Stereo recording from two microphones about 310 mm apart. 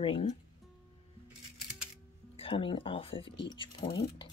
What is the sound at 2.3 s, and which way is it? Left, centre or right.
A woman's voice, centre.